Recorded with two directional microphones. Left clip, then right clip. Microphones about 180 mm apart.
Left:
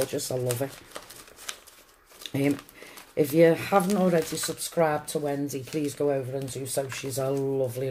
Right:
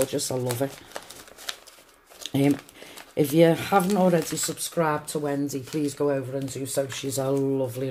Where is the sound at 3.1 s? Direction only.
35° right (ahead or behind).